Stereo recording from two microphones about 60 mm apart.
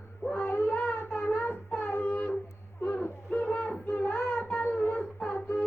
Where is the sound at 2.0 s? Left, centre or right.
Left.